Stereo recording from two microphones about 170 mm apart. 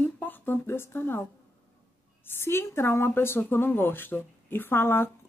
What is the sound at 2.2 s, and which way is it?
Speech, 15° left (ahead or behind).